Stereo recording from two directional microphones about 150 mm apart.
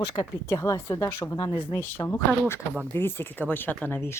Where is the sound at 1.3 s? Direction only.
30° left (ahead or behind).